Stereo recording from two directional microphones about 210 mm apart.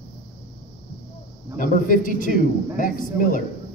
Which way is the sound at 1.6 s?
40° left (ahead or behind).